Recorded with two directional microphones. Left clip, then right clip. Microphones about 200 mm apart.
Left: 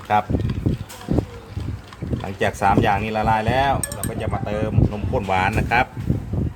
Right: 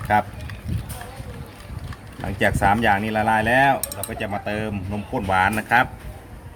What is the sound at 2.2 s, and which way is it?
Cutlery, 10° left (ahead or behind).